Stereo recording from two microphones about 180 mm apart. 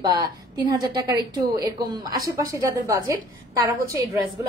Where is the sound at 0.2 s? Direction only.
20° right (ahead or behind).